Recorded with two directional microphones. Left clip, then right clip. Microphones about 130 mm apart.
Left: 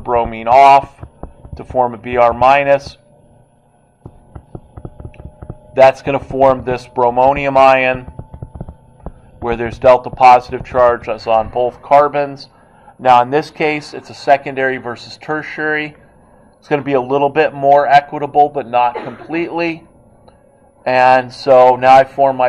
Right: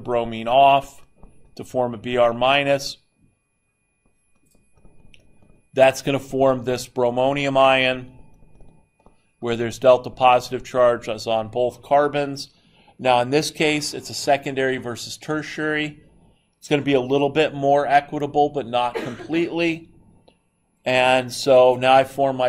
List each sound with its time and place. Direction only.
0.0 s speech: 35° right (ahead or behind)
5.8 s speech: 40° right (ahead or behind)
9.4 s speech: 35° right (ahead or behind)
20.8 s speech: 35° right (ahead or behind)